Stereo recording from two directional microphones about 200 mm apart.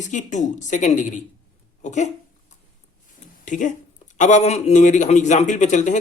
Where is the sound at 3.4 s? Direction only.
40° left (ahead or behind).